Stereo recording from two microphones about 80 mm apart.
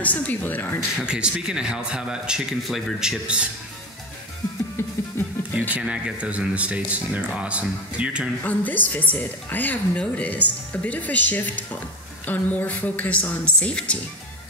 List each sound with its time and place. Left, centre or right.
0.0 s a woman's voice: left
0.9 s speech: centre
4.8 s music: left
5.8 s speech: centre
8.5 s a woman's voice: left